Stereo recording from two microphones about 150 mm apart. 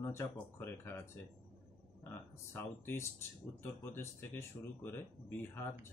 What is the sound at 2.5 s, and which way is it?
Speech, 15° left (ahead or behind).